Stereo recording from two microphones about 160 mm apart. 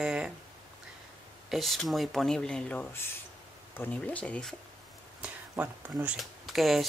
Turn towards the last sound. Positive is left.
turn(degrees=0)  # may be behind; listen again after turning